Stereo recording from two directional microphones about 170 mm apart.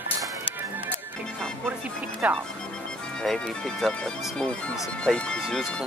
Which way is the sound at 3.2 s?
5° left (ahead or behind).